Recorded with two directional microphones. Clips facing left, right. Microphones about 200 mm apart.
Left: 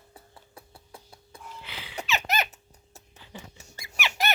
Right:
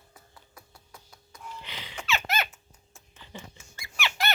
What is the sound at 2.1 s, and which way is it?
Squeak, 20° left (ahead or behind).